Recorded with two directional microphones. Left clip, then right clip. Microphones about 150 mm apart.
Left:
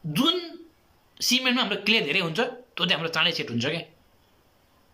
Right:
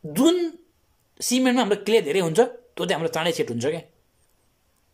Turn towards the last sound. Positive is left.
turn(degrees=-50)  # may be behind; listen again after turning